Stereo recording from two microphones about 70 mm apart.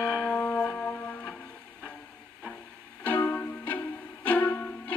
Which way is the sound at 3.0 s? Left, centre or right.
Left.